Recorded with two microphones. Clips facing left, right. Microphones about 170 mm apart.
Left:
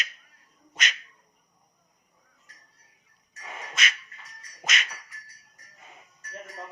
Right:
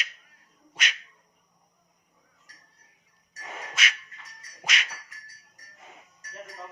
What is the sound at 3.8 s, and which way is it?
Music, 10° right (ahead or behind).